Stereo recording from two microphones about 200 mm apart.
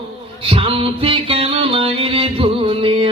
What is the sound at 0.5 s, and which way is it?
Music, 30° right (ahead or behind).